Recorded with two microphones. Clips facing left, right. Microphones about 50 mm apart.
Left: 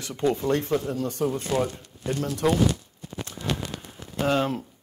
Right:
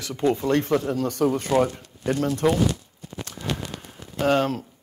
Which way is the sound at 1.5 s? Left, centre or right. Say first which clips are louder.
Right 6 dB; right.